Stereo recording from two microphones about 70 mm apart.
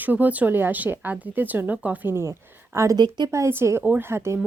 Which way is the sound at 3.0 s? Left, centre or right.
Right.